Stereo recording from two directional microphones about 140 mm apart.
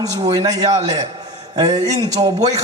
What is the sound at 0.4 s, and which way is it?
A man's voice, 25° right (ahead or behind).